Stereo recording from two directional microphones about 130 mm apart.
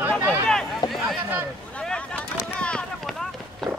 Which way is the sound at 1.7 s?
10° left (ahead or behind).